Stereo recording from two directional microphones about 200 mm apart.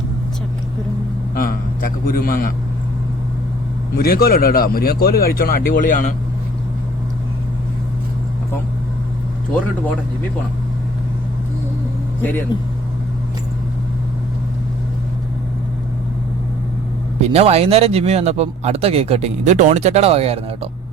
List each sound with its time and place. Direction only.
1.4 s a sound: 45° left (ahead or behind)
3.9 s speech: 50° left (ahead or behind)
12.5 s speech: 20° left (ahead or behind)
17.2 s speech: 30° right (ahead or behind)